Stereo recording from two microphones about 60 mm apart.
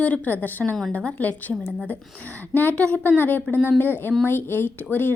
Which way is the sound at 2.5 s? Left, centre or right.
Left.